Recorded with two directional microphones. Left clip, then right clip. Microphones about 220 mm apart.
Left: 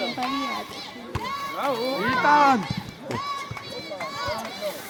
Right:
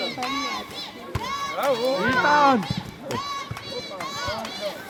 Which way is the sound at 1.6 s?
45° right (ahead or behind).